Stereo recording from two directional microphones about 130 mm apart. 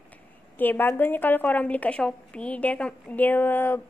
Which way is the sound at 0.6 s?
15° left (ahead or behind).